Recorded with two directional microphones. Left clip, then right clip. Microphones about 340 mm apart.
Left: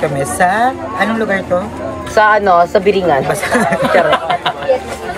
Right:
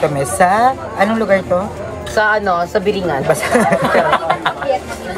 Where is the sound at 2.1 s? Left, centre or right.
Centre.